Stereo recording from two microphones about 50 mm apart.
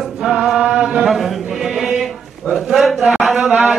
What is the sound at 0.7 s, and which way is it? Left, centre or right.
Chant, centre.